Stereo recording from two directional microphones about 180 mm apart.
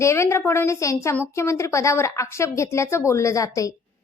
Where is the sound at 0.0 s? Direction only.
15° left (ahead or behind).